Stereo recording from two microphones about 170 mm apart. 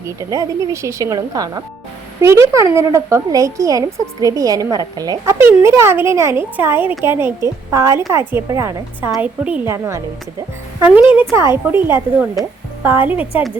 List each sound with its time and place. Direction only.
0.0 s a woman's voice: 20° right (ahead or behind)
11.2 s a woman's voice: 15° right (ahead or behind)